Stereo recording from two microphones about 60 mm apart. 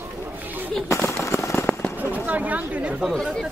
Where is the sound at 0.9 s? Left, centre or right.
Left.